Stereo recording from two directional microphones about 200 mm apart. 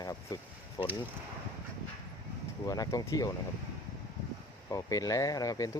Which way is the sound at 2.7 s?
20° left (ahead or behind).